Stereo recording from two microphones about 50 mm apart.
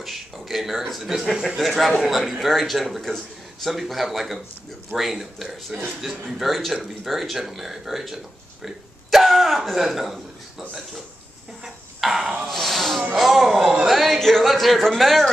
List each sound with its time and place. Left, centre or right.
0.0 s speech: centre
11.6 s a sound: centre
12.4 s snake: centre
13.1 s speech: centre
13.8 s a sound: centre
14.5 s speech: centre